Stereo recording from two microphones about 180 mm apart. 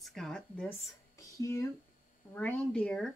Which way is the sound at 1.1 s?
15° left (ahead or behind).